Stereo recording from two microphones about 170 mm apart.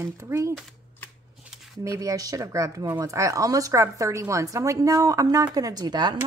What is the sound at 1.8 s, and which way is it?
Speech, 20° right (ahead or behind).